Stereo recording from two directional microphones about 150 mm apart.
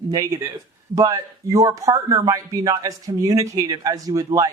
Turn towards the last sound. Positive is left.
turn(degrees=-25)  # may be behind; listen again after turning